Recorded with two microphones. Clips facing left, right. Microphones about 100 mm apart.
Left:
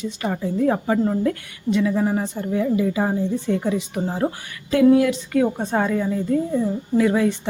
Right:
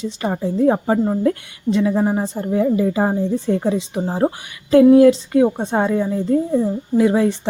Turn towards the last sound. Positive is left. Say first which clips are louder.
# right 3 dB
turn(degrees=-30)  # may be behind; listen again after turning